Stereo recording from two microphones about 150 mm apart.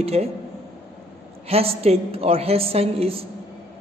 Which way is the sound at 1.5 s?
40° right (ahead or behind).